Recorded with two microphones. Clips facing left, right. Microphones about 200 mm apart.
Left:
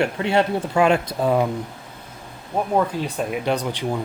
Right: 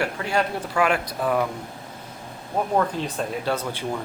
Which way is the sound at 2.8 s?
10° left (ahead or behind).